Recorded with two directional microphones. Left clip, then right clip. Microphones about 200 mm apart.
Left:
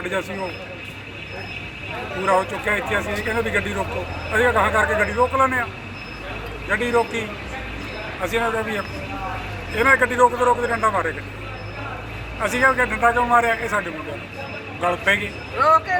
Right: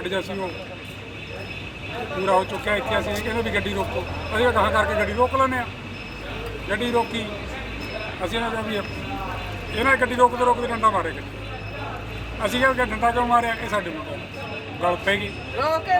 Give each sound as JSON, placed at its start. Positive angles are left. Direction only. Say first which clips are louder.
{"t": 0.0, "sound": "speech", "louder": "left 2 dB", "side_deg": 0}
{"t": 2.2, "sound": "a man's voice", "louder": "left 2 dB", "side_deg": 0}
{"t": 6.7, "sound": "a man's voice", "louder": "left 3 dB", "side_deg": 0}
{"t": 12.4, "sound": "a man's voice", "louder": "left 3 dB", "side_deg": 0}
{"t": 15.6, "sound": "speech", "louder": "left 5 dB", "side_deg": -25}